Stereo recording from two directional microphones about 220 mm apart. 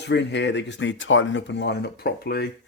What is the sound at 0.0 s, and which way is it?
Speech, 50° left (ahead or behind).